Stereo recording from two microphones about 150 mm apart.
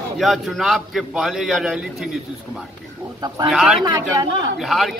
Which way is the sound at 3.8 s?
30° right (ahead or behind).